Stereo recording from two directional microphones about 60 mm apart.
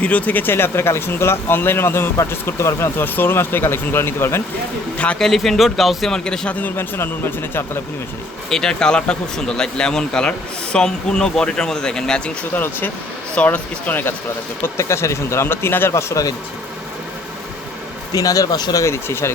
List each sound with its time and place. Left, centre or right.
0.0 s speech: left
0.5 s speech: left
3.0 s speech: left
5.2 s speech: centre
6.1 s speech: centre
6.5 s speech: left
6.7 s speech: left
8.4 s speech: centre
12.5 s speech: left
14.8 s speech: left
15.9 s speech: left
18.1 s speech: left
18.9 s speech: left